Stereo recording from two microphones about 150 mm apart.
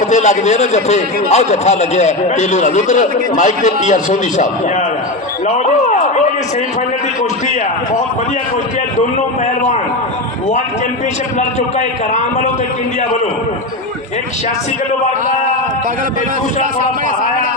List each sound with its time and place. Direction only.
0.0 s a man's voice: 50° left (ahead or behind)
5.5 s a man's voice: 50° left (ahead or behind)
11.3 s a man's voice: 50° left (ahead or behind)